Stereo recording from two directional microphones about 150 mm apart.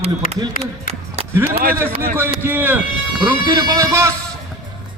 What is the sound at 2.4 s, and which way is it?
Speech, 15° right (ahead or behind).